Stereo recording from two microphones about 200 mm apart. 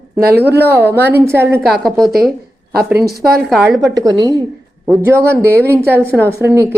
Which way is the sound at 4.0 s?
20° right (ahead or behind).